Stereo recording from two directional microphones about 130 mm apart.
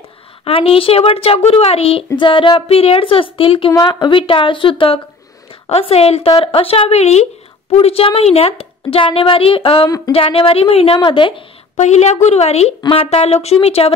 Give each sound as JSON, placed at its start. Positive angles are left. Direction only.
{"t": 0.5, "sound": "a woman's voice", "side_deg": 45}
{"t": 9.8, "sound": "a sound", "side_deg": 25}
{"t": 10.1, "sound": "a woman's voice", "side_deg": 45}
{"t": 11.7, "sound": "a woman's voice", "side_deg": 60}